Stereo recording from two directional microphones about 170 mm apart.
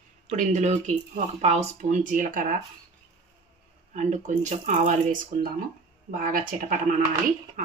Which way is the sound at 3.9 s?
45° right (ahead or behind).